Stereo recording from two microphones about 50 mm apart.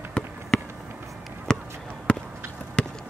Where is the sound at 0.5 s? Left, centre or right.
Centre.